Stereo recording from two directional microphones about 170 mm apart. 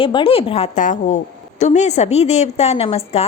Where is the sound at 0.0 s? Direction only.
30° left (ahead or behind).